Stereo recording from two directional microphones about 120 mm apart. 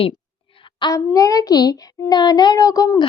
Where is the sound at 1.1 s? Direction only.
30° left (ahead or behind).